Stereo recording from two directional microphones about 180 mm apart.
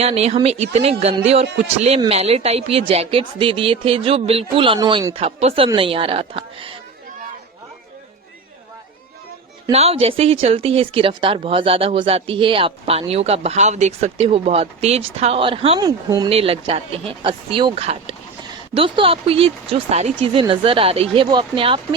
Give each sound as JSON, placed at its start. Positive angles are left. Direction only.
{"t": 0.0, "sound": "speech", "side_deg": -35}
{"t": 9.7, "sound": "speech", "side_deg": -35}
{"t": 15.9, "sound": "speech", "side_deg": -20}
{"t": 16.3, "sound": "speech", "side_deg": -30}